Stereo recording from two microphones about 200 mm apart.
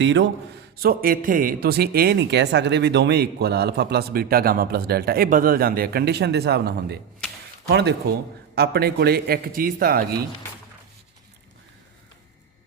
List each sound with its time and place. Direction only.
0.0 s speech: 60° right (ahead or behind)
0.8 s speech: 45° right (ahead or behind)